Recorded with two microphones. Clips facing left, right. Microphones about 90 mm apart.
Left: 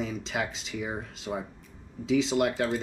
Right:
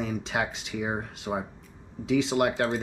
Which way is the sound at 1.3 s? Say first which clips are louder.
Right 3 dB; 25° right (ahead or behind).